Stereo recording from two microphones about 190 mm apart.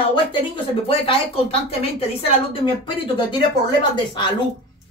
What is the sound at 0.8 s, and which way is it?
A woman's voice, 30° left (ahead or behind).